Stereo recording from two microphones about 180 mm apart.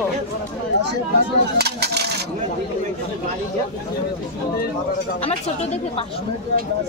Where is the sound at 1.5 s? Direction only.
65° right (ahead or behind).